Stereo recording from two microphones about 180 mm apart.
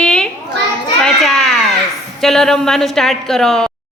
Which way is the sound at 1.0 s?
Centre (ahead or behind).